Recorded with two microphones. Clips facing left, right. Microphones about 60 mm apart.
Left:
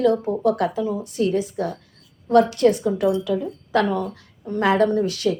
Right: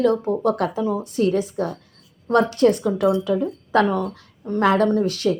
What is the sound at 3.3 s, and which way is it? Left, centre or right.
Speech, right.